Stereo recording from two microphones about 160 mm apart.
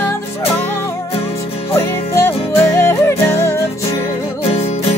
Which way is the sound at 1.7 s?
15° left (ahead or behind).